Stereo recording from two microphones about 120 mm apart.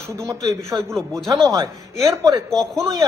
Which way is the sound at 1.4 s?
30° right (ahead or behind).